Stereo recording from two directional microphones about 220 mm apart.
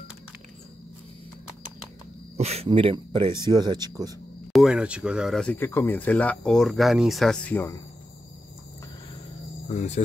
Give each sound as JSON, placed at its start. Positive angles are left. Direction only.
{"t": 2.3, "sound": "speech", "side_deg": -30}
{"t": 4.5, "sound": "speech", "side_deg": 0}
{"t": 9.7, "sound": "cricket", "side_deg": 30}